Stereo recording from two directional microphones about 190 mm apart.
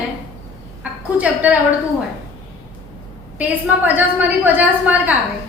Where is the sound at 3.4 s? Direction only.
10° right (ahead or behind).